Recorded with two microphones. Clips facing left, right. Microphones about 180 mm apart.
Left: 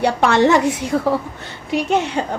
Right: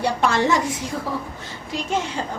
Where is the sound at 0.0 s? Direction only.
70° left (ahead or behind).